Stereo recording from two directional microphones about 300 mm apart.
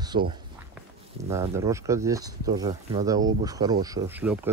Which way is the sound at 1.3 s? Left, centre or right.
Centre.